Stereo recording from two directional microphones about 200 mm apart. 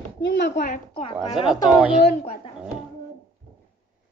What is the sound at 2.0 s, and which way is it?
Speech, 30° left (ahead or behind).